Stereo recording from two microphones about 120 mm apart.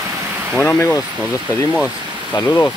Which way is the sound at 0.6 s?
15° left (ahead or behind).